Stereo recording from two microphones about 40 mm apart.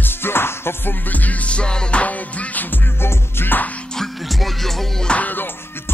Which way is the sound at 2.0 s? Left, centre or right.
Left.